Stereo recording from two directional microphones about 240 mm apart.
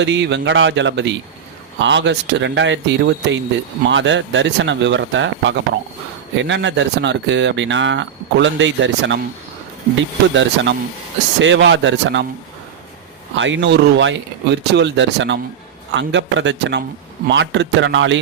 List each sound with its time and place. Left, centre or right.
0.0 s speech: right
10.3 s speech: right
13.3 s speech: right